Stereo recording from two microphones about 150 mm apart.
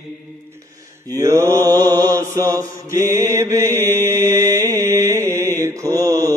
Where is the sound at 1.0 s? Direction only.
20° right (ahead or behind).